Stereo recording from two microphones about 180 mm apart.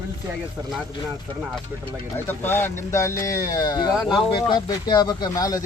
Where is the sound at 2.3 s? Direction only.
10° left (ahead or behind).